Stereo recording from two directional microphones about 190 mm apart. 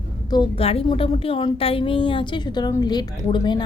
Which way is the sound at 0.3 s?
25° left (ahead or behind).